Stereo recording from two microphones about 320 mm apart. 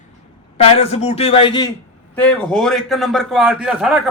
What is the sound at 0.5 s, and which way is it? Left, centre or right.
Speech, centre.